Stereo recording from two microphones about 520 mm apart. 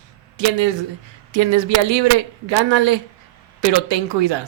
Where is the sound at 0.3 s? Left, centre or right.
Right.